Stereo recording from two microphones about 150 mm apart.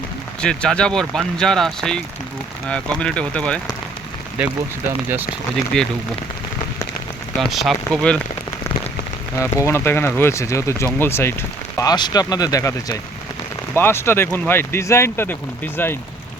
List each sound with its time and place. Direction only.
0.4 s speech: 5° left (ahead or behind)
5.7 s speech: 5° left (ahead or behind)
7.3 s speech: centre (ahead or behind)
9.4 s speech: 20° left (ahead or behind)
11.8 s speech: 25° left (ahead or behind)